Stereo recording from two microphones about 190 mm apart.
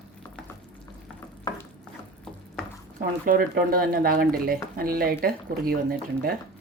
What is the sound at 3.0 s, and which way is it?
Speech, 50° right (ahead or behind).